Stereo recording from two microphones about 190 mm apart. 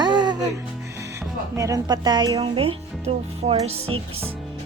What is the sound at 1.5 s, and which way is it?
Speech, 15° right (ahead or behind).